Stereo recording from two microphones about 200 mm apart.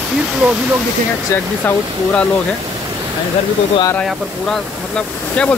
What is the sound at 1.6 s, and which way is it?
Speech, 5° left (ahead or behind).